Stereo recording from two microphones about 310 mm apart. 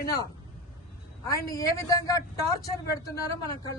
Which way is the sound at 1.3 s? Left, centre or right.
Centre.